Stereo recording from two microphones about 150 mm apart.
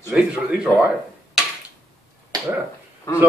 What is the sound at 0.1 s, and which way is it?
Speech, 5° right (ahead or behind).